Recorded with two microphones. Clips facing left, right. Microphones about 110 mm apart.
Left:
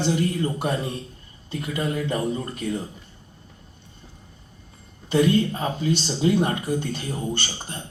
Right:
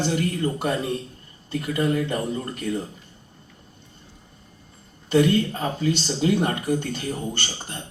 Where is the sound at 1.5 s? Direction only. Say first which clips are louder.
Right 4 dB; 55° right (ahead or behind).